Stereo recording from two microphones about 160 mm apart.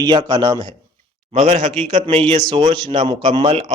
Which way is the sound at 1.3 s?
45° right (ahead or behind).